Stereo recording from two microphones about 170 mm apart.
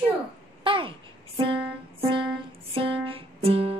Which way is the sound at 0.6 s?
30° right (ahead or behind).